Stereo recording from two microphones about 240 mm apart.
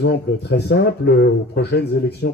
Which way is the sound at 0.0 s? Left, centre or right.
Left.